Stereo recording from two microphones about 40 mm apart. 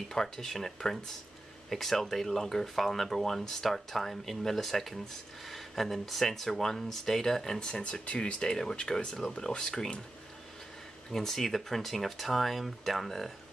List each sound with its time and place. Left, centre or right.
0.1 s speech: centre
7.7 s speech: left
11.1 s speech: centre